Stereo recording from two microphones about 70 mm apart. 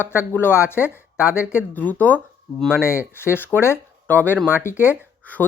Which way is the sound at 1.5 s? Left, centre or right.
Left.